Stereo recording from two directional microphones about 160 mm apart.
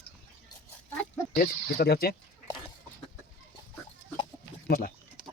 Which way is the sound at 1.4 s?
80° left.